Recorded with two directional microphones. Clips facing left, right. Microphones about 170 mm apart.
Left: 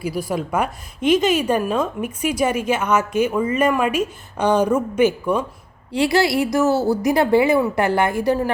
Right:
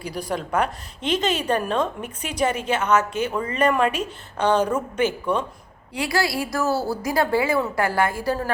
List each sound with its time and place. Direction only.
0.0 s a woman's voice: 10° left (ahead or behind)
5.9 s a woman's voice: 25° left (ahead or behind)